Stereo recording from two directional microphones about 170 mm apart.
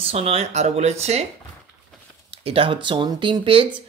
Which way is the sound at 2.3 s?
35° right (ahead or behind).